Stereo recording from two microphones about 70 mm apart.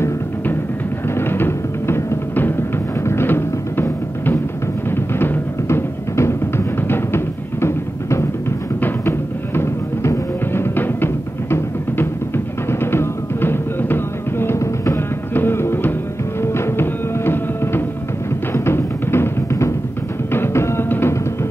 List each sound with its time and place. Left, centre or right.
1.1 s music: left
12.6 s music: left